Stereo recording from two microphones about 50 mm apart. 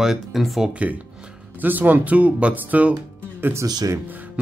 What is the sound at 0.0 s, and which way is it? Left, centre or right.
Speech, centre.